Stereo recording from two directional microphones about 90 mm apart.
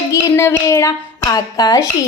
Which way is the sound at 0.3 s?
30° left (ahead or behind).